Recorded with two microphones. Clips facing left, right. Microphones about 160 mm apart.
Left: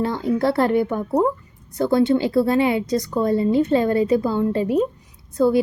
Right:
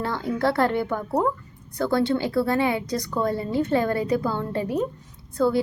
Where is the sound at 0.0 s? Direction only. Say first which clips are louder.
Left 4 dB; 20° left (ahead or behind).